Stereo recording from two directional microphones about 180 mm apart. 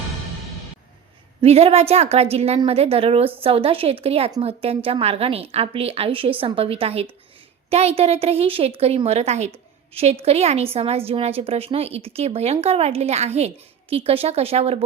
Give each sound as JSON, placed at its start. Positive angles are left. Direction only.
{"t": 1.4, "sound": "a woman's voice", "side_deg": -35}